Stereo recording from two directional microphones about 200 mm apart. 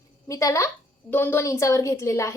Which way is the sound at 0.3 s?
15° left (ahead or behind).